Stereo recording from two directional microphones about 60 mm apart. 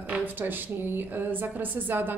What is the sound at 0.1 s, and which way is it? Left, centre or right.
A woman's voice, right.